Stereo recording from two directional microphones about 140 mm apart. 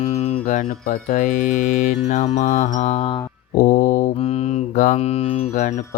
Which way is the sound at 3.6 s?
75° left (ahead or behind).